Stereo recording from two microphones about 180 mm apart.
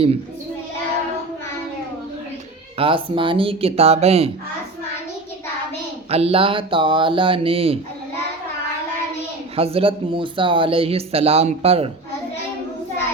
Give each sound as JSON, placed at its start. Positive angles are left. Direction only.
{"t": 2.7, "sound": "speech", "side_deg": -30}
{"t": 6.1, "sound": "speech", "side_deg": -35}
{"t": 9.6, "sound": "speech", "side_deg": -30}